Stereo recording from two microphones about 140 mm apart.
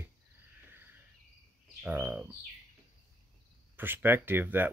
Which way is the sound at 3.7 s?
15° right (ahead or behind).